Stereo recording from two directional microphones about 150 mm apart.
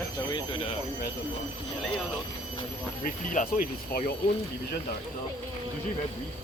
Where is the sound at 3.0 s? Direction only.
65° left (ahead or behind); by 4.1 s 80° left.